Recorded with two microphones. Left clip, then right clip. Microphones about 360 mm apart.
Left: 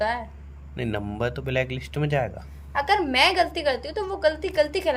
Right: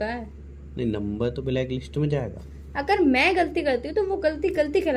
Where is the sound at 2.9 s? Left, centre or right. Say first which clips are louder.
Even; left.